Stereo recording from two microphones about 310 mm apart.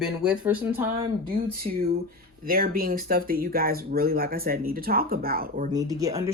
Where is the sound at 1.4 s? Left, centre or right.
Right.